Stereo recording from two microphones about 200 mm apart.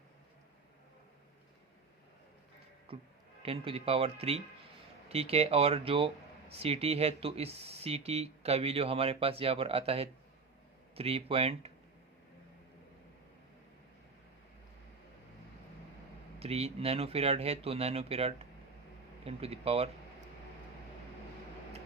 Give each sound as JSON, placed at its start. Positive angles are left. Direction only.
{"t": 2.9, "sound": "speech", "side_deg": -25}
{"t": 16.4, "sound": "speech", "side_deg": -30}